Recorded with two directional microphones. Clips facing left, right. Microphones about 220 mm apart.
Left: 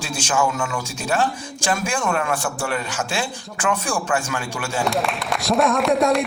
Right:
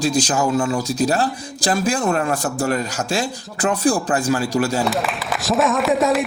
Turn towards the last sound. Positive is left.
turn(degrees=0)  # may be behind; listen again after turning